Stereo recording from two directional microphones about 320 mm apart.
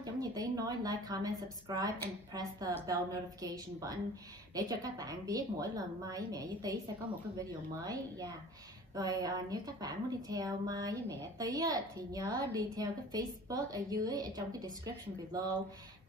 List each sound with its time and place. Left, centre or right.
0.0 s a woman's voice: centre